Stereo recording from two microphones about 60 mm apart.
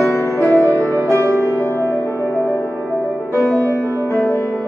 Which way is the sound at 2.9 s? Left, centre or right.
Left.